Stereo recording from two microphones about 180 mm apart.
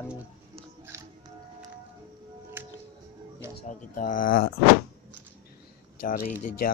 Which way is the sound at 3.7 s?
45° left (ahead or behind).